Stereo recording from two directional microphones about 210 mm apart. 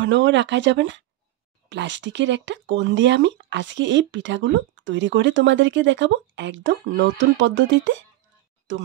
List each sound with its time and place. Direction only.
0.0 s speech: 60° right (ahead or behind)